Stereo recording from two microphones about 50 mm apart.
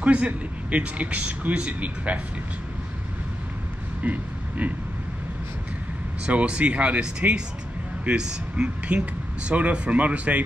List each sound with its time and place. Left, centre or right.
0.0 s a man's voice: right
4.0 s speech: right
6.2 s a man's voice: right
8.6 s speech: right